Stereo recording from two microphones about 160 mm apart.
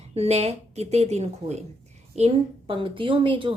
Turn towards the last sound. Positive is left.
turn(degrees=-30)  # may be behind; listen again after turning